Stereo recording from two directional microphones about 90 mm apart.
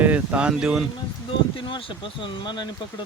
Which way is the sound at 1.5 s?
75° left (ahead or behind).